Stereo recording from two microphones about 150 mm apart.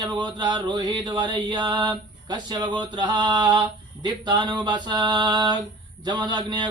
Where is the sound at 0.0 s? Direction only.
30° right (ahead or behind).